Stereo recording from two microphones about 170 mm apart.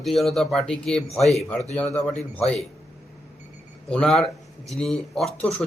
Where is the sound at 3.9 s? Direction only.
5° left (ahead or behind).